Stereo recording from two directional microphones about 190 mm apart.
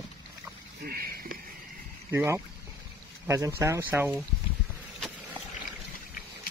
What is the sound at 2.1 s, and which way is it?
A man's voice, 15° right (ahead or behind).